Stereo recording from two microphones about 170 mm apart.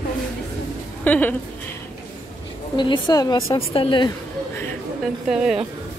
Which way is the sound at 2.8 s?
25° left (ahead or behind).